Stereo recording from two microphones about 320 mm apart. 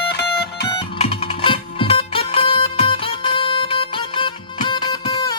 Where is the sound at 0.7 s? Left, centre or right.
Centre.